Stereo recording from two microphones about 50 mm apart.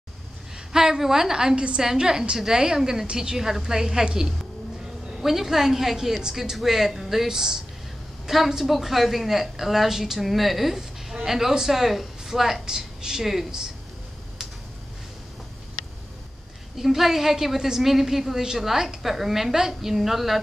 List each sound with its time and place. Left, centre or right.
0.7 s a woman's voice: centre
16.7 s a woman's voice: centre